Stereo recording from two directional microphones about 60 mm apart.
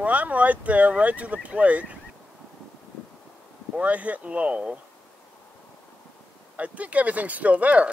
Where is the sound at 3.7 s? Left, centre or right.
Right.